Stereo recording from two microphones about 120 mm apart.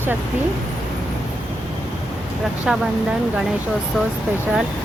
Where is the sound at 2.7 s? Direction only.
5° right (ahead or behind).